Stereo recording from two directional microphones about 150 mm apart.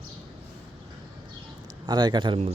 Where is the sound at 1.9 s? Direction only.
30° right (ahead or behind).